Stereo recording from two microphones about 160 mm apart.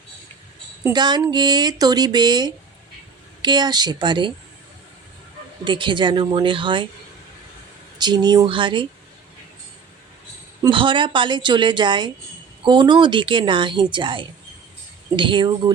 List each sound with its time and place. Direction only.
0.9 s speech: 25° right (ahead or behind)
5.6 s speech: 30° right (ahead or behind)
7.9 s speech: 25° right (ahead or behind)
10.6 s speech: 30° right (ahead or behind)